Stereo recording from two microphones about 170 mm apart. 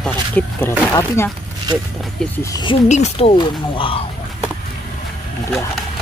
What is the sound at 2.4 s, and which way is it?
Speech, 25° left (ahead or behind).